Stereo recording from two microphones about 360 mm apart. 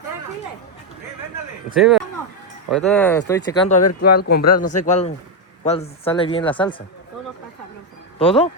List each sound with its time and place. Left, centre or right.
1.7 s speech: centre
3.8 s speech: left
4.2 s speech: left
4.4 s a man's voice: left
4.7 s speech: centre
8.2 s speech: centre